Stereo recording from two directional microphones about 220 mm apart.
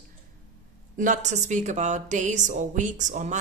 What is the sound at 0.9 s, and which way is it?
Speech, 35° right (ahead or behind).